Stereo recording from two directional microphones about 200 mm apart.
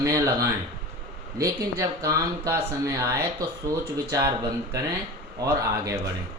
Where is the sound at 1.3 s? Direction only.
15° right (ahead or behind).